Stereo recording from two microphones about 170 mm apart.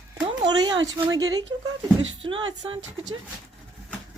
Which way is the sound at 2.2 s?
30° right (ahead or behind).